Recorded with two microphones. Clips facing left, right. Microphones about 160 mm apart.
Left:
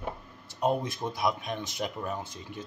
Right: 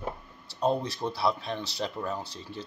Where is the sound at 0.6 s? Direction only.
15° left (ahead or behind).